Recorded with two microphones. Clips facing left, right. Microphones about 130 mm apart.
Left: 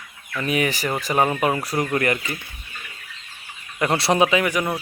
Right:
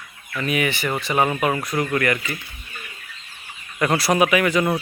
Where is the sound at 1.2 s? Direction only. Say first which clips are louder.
Even; 25° left (ahead or behind).